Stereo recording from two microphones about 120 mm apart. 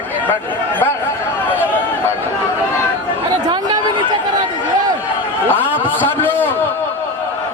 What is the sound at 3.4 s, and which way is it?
Chatter, 35° right (ahead or behind).